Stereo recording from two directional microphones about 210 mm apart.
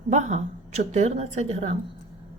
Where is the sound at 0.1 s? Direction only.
35° right (ahead or behind).